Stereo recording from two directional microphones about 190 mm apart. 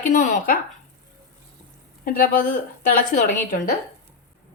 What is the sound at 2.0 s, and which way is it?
A woman's voice, 50° left (ahead or behind).